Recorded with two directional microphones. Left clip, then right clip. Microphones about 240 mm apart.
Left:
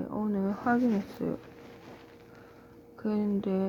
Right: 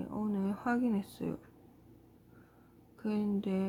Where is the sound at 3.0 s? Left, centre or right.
Centre.